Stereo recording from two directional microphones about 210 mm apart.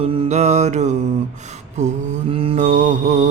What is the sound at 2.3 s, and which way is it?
Mantra, 30° right (ahead or behind).